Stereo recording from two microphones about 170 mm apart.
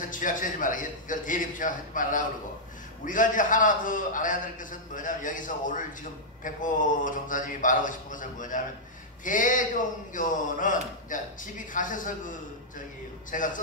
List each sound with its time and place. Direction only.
0.1 s a man's voice: 50° left (ahead or behind)